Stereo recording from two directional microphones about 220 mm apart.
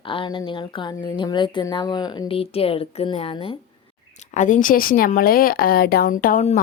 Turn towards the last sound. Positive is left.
turn(degrees=35)  # may be behind; listen again after turning